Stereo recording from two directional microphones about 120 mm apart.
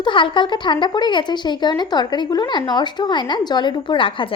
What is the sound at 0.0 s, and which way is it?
Speech, 45° left (ahead or behind).